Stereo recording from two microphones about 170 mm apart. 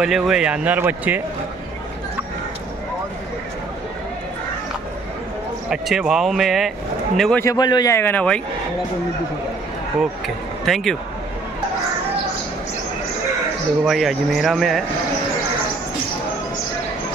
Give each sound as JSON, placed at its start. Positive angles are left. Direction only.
{"t": 0.0, "sound": "speech", "side_deg": -5}
{"t": 5.7, "sound": "speech", "side_deg": -5}
{"t": 7.4, "sound": "speech", "side_deg": 25}
{"t": 10.2, "sound": "speech", "side_deg": 0}
{"t": 13.8, "sound": "speech", "side_deg": 0}